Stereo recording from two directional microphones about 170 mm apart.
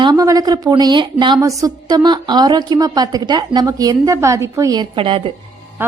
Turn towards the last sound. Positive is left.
turn(degrees=-30)  # may be behind; listen again after turning